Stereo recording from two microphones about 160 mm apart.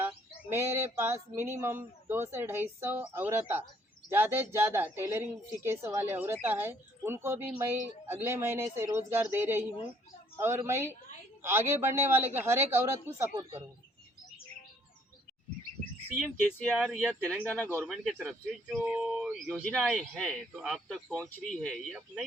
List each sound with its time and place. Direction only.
0.5 s a woman's voice: 15° right (ahead or behind)
16.2 s speech: centre (ahead or behind)